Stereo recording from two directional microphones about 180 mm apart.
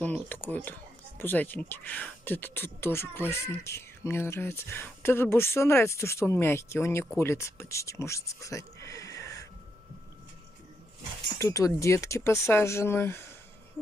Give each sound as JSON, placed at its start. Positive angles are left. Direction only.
{"t": 0.0, "sound": "speech", "side_deg": 10}
{"t": 11.3, "sound": "speech", "side_deg": 15}